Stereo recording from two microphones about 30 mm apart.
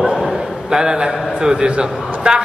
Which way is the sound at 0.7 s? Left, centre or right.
Right.